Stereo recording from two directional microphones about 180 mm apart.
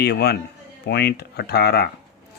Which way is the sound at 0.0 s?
65° left (ahead or behind).